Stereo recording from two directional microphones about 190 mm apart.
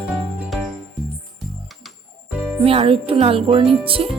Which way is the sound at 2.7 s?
30° right (ahead or behind).